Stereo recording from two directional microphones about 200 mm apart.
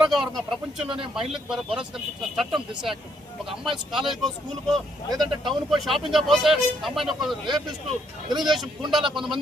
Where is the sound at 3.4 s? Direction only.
Centre (ahead or behind).